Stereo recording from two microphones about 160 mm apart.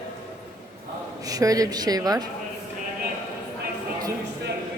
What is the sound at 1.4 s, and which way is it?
Speech, 20° right (ahead or behind).